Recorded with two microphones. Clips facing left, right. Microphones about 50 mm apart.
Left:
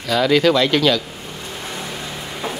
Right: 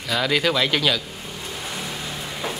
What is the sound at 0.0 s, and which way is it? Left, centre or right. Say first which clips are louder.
Speech: left 6 dB; centre.